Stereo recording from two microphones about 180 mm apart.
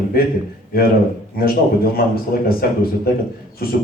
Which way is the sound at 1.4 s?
55° left (ahead or behind).